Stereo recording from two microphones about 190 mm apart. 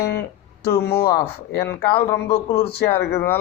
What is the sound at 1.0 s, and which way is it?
Speech, 15° left (ahead or behind).